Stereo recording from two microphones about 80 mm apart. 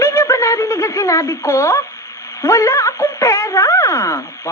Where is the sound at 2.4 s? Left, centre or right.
Left.